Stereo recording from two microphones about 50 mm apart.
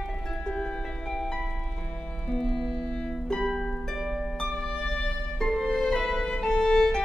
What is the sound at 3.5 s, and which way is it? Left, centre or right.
Harp, centre.